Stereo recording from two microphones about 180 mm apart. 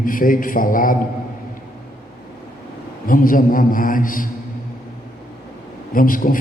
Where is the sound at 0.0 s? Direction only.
50° left (ahead or behind).